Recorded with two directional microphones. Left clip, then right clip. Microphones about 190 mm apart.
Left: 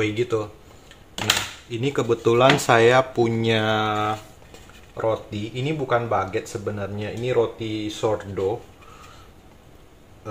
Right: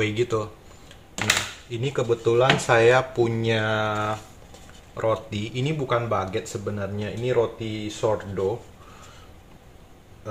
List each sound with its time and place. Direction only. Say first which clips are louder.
0.0 s speech: left 1 dB; 5° right (ahead or behind)
1.7 s speech: left 3 dB; 15° left (ahead or behind)
2.0 s speech: left 3 dB; 30° left (ahead or behind); by 4.2 s 10° left (ahead or behind)
4.9 s speech: even; 10° right (ahead or behind)
6.8 s speech: left 1 dB; centre (ahead or behind)